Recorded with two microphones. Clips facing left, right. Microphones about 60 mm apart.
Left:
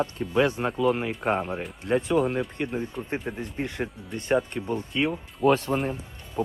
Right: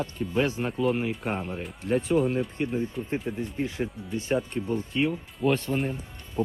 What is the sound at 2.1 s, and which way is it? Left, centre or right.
Speech, left.